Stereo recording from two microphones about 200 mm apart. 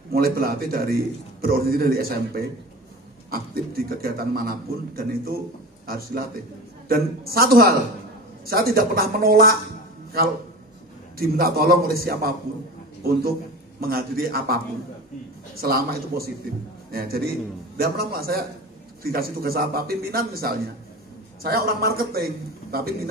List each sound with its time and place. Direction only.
0.1 s a man's voice: 50° right (ahead or behind)
11.1 s a man's voice: 50° right (ahead or behind)
15.6 s a man's voice: 50° right (ahead or behind)